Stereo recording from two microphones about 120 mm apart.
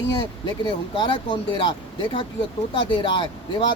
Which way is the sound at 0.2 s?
45° left (ahead or behind).